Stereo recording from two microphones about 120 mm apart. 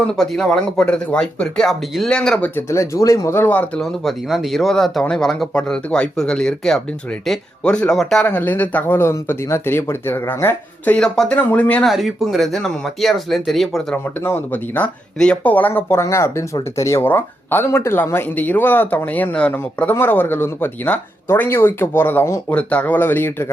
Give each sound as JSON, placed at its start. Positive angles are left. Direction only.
{"t": 0.1, "sound": "speech", "side_deg": 5}
{"t": 2.6, "sound": "speech", "side_deg": 25}
{"t": 3.8, "sound": "speech", "side_deg": 0}
{"t": 8.3, "sound": "speech", "side_deg": 15}
{"t": 11.9, "sound": "speech", "side_deg": 0}
{"t": 13.9, "sound": "speech", "side_deg": 15}